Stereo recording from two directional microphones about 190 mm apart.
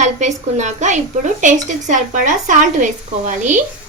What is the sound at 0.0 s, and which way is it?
A woman's voice, 40° right (ahead or behind).